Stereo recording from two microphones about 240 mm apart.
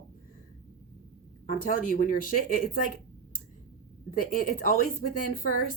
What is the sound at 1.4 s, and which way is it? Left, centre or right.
Speech, left.